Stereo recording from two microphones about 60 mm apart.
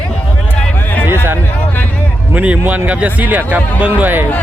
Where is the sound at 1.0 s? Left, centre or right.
Right.